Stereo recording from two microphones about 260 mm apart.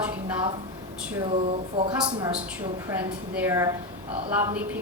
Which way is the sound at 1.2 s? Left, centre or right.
Right.